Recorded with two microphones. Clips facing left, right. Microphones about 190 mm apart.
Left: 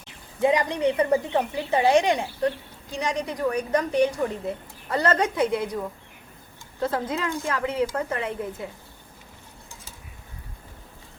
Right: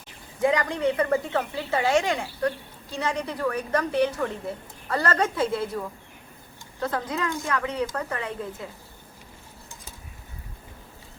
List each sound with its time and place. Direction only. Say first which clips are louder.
0.4 s a woman's voice: left 2 dB; 20° left (ahead or behind)
6.8 s speech: left 2 dB; 25° left (ahead or behind)